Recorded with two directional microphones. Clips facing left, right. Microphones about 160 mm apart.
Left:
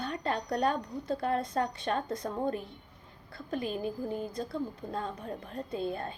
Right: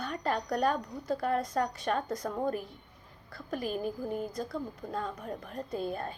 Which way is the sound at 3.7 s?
5° right (ahead or behind).